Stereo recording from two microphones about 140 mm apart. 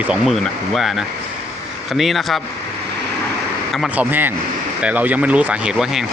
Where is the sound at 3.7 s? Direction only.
Centre (ahead or behind).